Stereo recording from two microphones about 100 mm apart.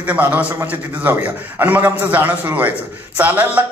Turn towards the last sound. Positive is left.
turn(degrees=-15)  # may be behind; listen again after turning